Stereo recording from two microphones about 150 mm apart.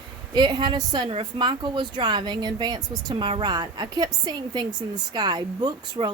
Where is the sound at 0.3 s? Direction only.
30° right (ahead or behind).